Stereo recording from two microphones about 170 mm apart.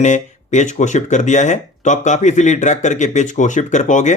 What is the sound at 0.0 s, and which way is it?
Speech, 45° left (ahead or behind).